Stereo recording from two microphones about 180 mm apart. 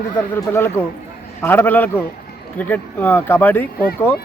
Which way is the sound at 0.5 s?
10° left (ahead or behind).